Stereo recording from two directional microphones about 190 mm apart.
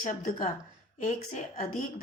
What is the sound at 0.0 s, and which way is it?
A woman's voice, 45° left (ahead or behind).